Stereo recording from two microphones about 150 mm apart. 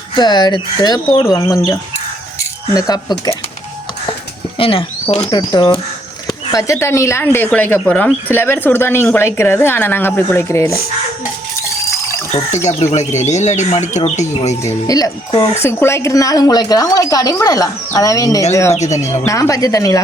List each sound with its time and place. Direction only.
0.2 s speech: 30° left (ahead or behind)
4.5 s speech: 35° left (ahead or behind); by 10.8 s 20° left (ahead or behind)
12.9 s speech: 50° left (ahead or behind)
14.6 s speech: 20° left (ahead or behind)
18.7 s speech: 50° left (ahead or behind)
19.0 s speech: 20° left (ahead or behind)